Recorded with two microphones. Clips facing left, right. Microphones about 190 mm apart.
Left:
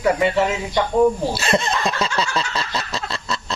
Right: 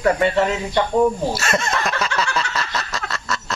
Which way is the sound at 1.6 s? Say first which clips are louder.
Left 1 dB; 30° left (ahead or behind).